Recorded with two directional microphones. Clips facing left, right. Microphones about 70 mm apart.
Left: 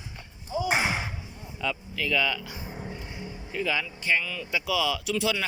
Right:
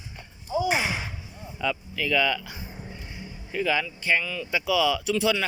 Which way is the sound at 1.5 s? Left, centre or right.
Centre.